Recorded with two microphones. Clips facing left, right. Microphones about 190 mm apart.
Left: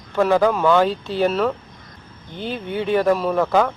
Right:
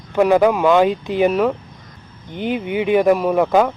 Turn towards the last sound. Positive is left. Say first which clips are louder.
# right 3 dB
turn(degrees=-15)  # may be behind; listen again after turning